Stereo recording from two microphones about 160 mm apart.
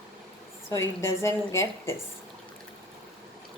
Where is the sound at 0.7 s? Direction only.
15° left (ahead or behind).